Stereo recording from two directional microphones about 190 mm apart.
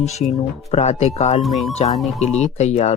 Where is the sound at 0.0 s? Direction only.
35° left (ahead or behind).